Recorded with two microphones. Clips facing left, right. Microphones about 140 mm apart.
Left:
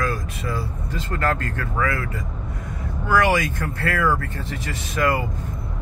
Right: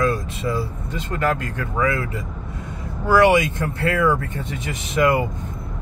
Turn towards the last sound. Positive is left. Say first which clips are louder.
# right 4 dB
turn(degrees=-25)  # may be behind; listen again after turning